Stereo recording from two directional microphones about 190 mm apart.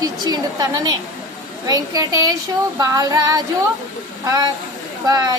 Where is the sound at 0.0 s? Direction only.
20° right (ahead or behind).